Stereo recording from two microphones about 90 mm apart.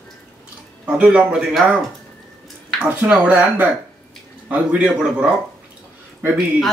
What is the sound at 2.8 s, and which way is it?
Speech, 15° right (ahead or behind).